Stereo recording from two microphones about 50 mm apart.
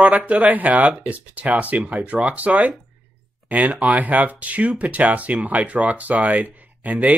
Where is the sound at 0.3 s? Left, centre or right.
Right.